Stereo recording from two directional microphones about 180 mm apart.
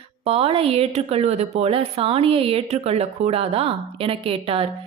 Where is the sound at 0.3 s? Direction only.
30° right (ahead or behind).